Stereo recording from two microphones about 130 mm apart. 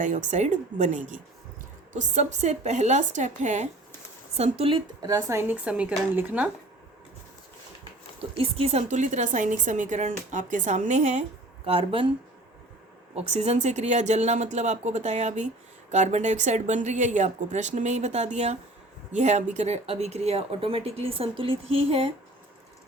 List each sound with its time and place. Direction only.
0.0 s a woman's voice: 70° right (ahead or behind)
4.4 s speech: 50° right (ahead or behind)
5.0 s speech: 25° right (ahead or behind)
8.2 s a woman's voice: 50° right (ahead or behind)
13.1 s a woman's voice: 50° right (ahead or behind)